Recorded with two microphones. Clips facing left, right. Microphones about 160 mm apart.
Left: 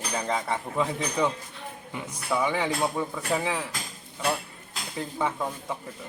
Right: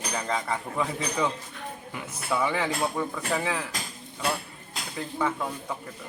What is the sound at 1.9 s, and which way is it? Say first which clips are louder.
Speech: left 1 dB; 15° left (ahead or behind).